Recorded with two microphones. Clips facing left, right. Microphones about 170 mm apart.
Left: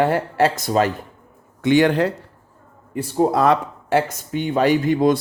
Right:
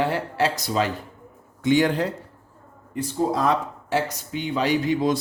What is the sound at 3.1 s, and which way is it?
Speech, 65° left (ahead or behind).